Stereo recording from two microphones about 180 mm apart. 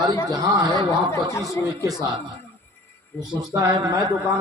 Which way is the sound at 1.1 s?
15° left (ahead or behind).